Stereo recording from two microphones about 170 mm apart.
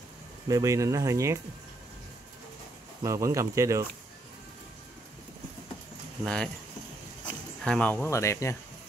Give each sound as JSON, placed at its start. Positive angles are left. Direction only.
{"t": 0.5, "sound": "speech", "side_deg": -20}
{"t": 3.0, "sound": "speech", "side_deg": -20}
{"t": 6.2, "sound": "speech", "side_deg": 5}
{"t": 7.6, "sound": "speech", "side_deg": 5}